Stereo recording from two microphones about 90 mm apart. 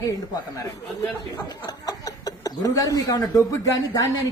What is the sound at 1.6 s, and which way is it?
A man's voice, 45° left (ahead or behind).